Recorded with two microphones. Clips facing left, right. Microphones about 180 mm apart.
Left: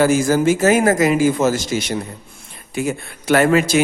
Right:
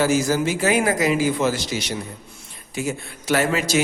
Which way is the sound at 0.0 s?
50° left (ahead or behind).